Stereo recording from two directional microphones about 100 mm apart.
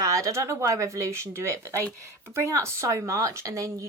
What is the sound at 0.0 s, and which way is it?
Speech, 30° right (ahead or behind).